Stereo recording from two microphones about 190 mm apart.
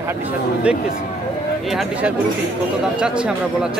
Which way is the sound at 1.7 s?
5° right (ahead or behind).